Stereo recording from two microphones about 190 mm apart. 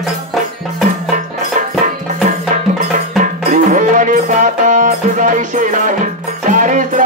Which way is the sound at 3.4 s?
45° right (ahead or behind).